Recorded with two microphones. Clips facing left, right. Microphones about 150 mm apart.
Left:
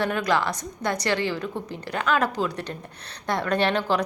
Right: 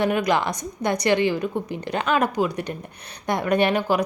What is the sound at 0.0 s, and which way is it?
A woman's voice, 15° right (ahead or behind).